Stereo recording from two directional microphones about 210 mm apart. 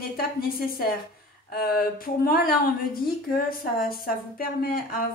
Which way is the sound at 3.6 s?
45° left (ahead or behind).